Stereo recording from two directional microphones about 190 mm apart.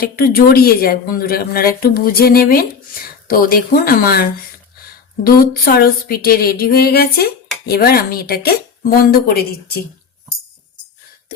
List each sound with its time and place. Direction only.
0.0 s speech: 50° left (ahead or behind)